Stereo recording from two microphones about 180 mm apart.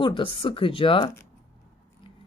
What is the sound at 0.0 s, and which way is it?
Speech, 30° left (ahead or behind).